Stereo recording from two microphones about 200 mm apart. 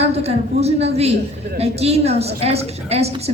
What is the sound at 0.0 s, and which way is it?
A woman's voice, 30° right (ahead or behind).